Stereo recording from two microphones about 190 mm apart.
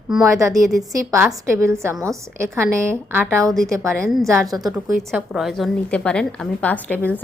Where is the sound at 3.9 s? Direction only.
Centre (ahead or behind).